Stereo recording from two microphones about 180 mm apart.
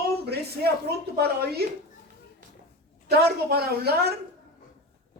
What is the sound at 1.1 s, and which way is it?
Speech, 60° right (ahead or behind).